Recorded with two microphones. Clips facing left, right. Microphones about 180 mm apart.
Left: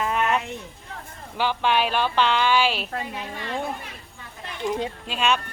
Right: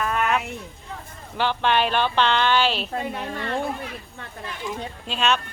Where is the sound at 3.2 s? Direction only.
60° right (ahead or behind).